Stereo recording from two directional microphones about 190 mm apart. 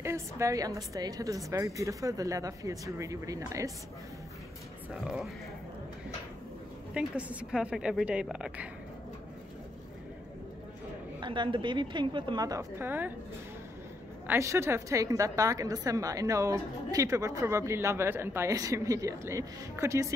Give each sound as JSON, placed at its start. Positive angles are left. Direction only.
{"t": 0.0, "sound": "a woman's voice", "side_deg": -15}
{"t": 5.0, "sound": "a woman's voice", "side_deg": -5}
{"t": 6.9, "sound": "a woman's voice", "side_deg": -5}
{"t": 11.1, "sound": "a woman's voice", "side_deg": -25}
{"t": 14.2, "sound": "a woman's voice", "side_deg": -15}